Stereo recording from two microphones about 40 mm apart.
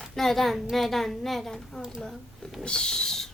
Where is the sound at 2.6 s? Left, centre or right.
Left.